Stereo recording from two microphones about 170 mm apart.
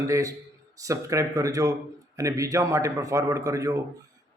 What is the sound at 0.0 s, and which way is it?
A man's voice, 20° right (ahead or behind).